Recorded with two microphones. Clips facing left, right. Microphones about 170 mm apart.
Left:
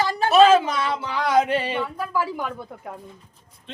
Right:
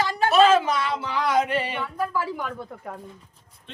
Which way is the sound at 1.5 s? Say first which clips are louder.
Left 3 dB; 30° left (ahead or behind).